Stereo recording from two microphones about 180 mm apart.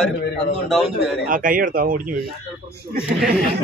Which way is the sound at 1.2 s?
50° right (ahead or behind).